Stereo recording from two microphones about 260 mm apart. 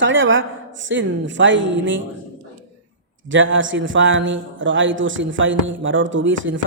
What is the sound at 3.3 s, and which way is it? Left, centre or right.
A man's voice, right.